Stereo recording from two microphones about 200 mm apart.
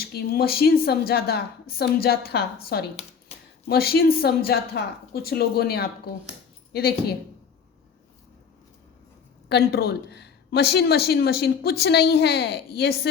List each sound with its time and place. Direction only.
0.0 s speech: 50° left (ahead or behind)
9.5 s speech: 50° left (ahead or behind)